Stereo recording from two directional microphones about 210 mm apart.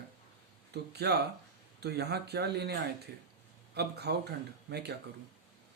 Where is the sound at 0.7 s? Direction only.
50° right (ahead or behind).